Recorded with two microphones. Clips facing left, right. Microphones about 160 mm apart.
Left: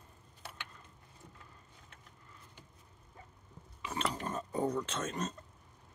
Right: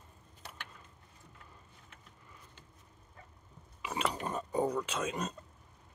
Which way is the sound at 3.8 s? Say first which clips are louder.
Right 2 dB; 10° right (ahead or behind).